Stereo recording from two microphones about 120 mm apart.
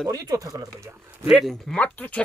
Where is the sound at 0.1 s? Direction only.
30° right (ahead or behind).